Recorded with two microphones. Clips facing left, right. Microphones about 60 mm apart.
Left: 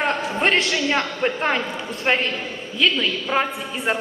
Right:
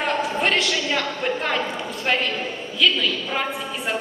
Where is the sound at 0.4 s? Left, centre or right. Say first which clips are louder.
Left 6 dB; left.